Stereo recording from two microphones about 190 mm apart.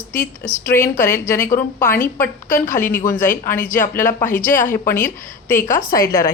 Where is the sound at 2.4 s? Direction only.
45° left (ahead or behind).